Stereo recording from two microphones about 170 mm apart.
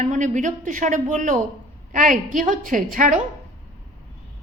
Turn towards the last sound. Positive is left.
turn(degrees=-50)  # may be behind; listen again after turning